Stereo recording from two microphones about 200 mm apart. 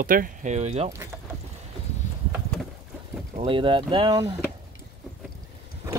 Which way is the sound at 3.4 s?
25° right (ahead or behind).